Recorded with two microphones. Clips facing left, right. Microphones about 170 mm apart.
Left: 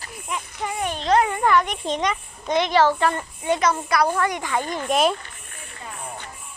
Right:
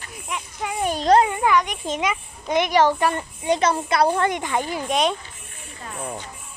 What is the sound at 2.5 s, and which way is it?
A child's voice, 15° right (ahead or behind).